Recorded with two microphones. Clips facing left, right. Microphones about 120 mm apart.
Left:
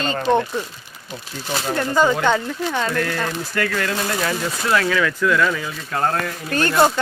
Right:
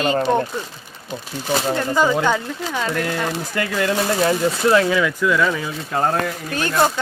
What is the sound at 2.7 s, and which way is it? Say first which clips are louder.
Speech: even; 10° right (ahead or behind).